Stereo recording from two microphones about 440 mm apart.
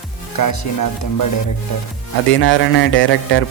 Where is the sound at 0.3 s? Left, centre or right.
Left.